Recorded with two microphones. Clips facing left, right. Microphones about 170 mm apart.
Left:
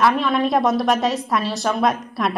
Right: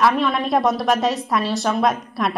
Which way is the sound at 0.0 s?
Centre (ahead or behind).